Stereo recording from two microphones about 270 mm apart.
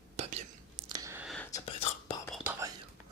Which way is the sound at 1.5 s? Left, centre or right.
Left.